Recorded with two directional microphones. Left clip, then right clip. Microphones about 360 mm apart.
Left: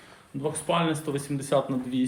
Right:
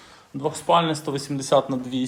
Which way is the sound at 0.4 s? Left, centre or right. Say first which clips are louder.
Right 6 dB; centre.